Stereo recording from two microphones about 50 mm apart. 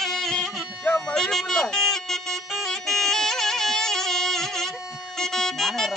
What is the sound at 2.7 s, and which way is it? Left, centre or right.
Music, centre.